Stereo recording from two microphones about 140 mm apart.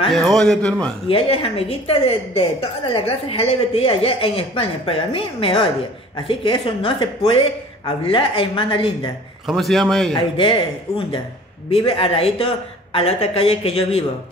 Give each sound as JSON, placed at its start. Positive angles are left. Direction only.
{"t": 0.1, "sound": "a man's voice", "side_deg": 0}
{"t": 1.0, "sound": "a woman's voice", "side_deg": 40}
{"t": 9.5, "sound": "a man's voice", "side_deg": 0}
{"t": 10.3, "sound": "a woman's voice", "side_deg": 40}